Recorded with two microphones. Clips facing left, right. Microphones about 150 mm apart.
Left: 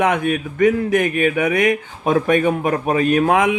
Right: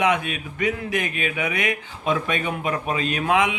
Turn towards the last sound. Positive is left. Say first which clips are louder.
# left 6 dB
turn(degrees=45)  # may be behind; listen again after turning